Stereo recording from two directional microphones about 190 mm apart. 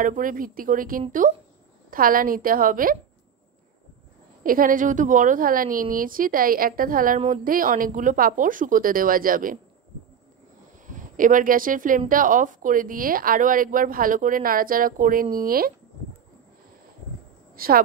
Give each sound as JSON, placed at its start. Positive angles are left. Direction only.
{"t": 0.0, "sound": "speech", "side_deg": -45}
{"t": 4.4, "sound": "speech", "side_deg": -45}
{"t": 10.9, "sound": "speech", "side_deg": -45}
{"t": 17.6, "sound": "a woman's voice", "side_deg": -50}